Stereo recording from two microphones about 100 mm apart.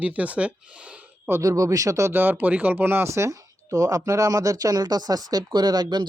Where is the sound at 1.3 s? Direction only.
35° right (ahead or behind).